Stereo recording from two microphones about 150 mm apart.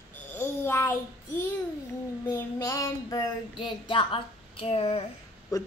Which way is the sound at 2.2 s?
20° left (ahead or behind).